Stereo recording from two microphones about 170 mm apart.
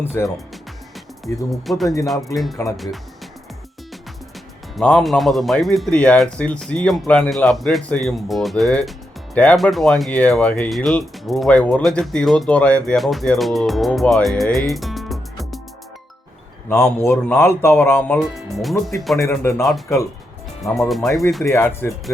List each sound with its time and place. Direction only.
0.0 s speech: 10° left (ahead or behind)
1.7 s speech: centre (ahead or behind)
4.8 s speech: 5° left (ahead or behind)
14.7 s music: centre (ahead or behind)
16.6 s speech: 15° left (ahead or behind)
18.2 s speech: centre (ahead or behind)
19.1 s speech: 15° left (ahead or behind)
20.7 s speech: centre (ahead or behind)
21.5 s speech: 15° left (ahead or behind)